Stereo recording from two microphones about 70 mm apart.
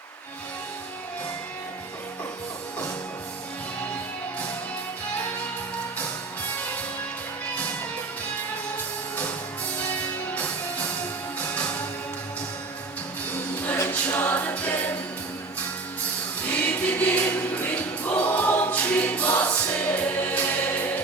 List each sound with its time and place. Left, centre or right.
9.8 s music: left
14.1 s music: left
16.5 s music: left